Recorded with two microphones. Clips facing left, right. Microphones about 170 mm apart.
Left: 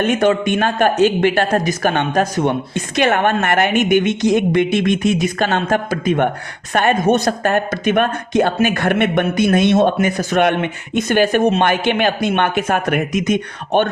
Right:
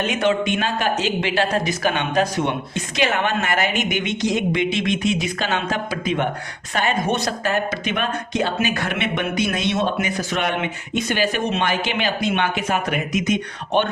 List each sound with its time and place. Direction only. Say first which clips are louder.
0.0 s a man's voice: left 5 dB; 50° left (ahead or behind)